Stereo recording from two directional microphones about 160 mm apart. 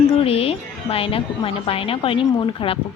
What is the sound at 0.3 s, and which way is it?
Speech, 40° left (ahead or behind).